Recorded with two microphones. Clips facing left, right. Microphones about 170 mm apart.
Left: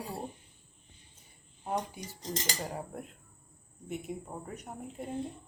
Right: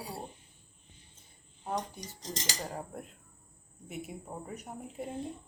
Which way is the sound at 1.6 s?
10° left (ahead or behind).